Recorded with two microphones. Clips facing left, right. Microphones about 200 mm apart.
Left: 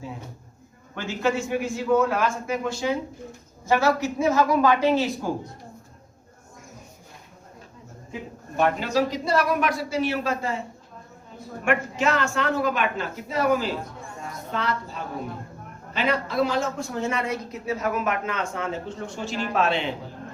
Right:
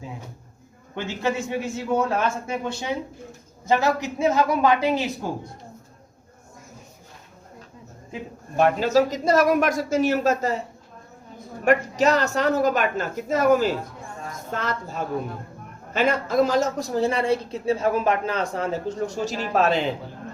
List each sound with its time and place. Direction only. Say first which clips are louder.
1.2 s a man's voice: left 2 dB; 20° right (ahead or behind)
8.9 s a man's voice: right 4 dB; 45° right (ahead or behind)
11.6 s a woman's voice: right 4 dB; 40° right (ahead or behind)